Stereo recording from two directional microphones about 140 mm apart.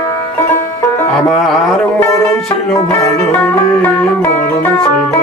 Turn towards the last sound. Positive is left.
turn(degrees=15)  # may be behind; listen again after turning